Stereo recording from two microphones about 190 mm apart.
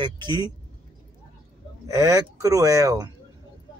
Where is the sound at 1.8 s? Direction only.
15° right (ahead or behind).